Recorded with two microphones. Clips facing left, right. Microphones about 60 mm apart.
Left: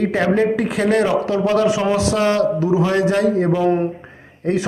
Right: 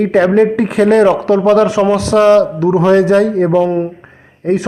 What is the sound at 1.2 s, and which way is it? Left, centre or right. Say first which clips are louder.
A man's voice: right 7 dB; right.